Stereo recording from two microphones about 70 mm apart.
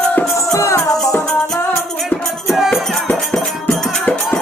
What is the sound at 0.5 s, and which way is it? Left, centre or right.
Music, left.